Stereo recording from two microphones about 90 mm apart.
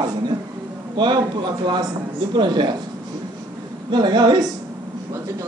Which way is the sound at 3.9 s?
50° right (ahead or behind).